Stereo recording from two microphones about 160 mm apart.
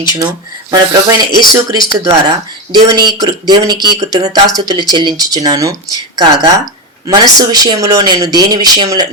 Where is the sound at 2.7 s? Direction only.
25° right (ahead or behind).